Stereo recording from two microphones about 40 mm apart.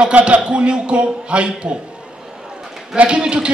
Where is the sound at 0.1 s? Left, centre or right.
Right.